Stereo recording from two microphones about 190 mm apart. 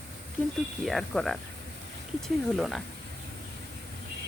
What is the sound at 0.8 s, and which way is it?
Speech, centre (ahead or behind).